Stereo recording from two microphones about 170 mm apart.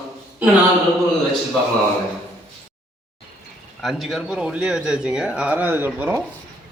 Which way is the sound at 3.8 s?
Centre (ahead or behind).